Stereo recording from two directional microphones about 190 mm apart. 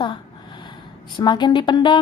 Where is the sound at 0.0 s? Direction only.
25° left (ahead or behind).